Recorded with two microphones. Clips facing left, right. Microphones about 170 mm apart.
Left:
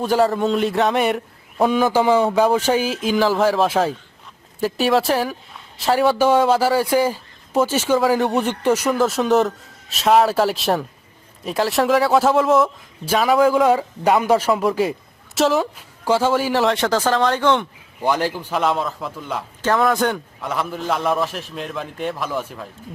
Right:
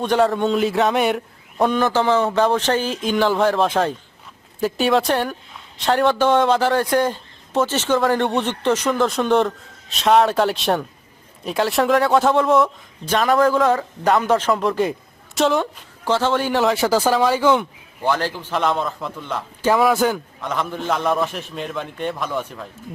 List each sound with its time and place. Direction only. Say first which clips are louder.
0.0 s speech: even; 5° left (ahead or behind)
18.0 s a man's voice: left 1 dB; 15° left (ahead or behind)
19.6 s speech: right 1 dB; 5° right (ahead or behind)